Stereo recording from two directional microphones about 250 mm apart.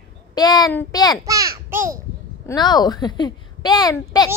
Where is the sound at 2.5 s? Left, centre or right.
Centre.